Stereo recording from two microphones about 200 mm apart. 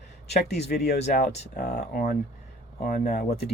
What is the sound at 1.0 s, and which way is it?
Speech, 35° left (ahead or behind).